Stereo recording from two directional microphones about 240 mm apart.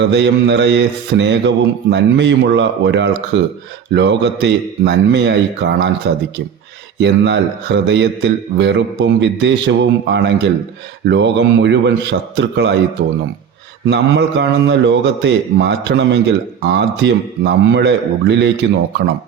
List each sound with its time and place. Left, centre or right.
0.1 s a man's voice: right
7.0 s a man's voice: right
13.9 s a man's voice: right